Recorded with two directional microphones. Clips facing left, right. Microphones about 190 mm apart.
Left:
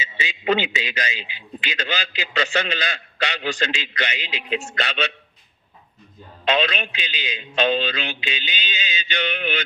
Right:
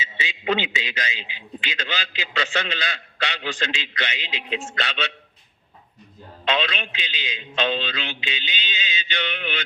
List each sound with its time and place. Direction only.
0.0 s a man's voice: 45° left (ahead or behind)
1.1 s a man's voice: 10° left (ahead or behind)
1.6 s a man's voice: 45° left (ahead or behind)
6.5 s a man's voice: 45° left (ahead or behind)